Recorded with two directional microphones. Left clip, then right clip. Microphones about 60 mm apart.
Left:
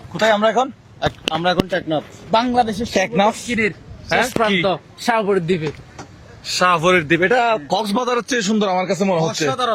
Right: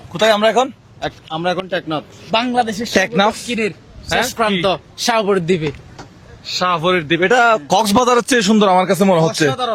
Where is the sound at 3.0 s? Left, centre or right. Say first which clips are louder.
Right 1 dB; right.